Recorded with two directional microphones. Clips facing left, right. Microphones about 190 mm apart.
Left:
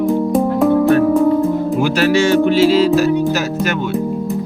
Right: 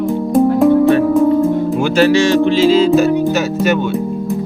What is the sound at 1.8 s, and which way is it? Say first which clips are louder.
Speech: right 3 dB; 5° left (ahead or behind).